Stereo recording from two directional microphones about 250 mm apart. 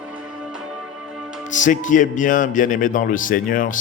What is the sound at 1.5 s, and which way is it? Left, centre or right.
A man's voice, left.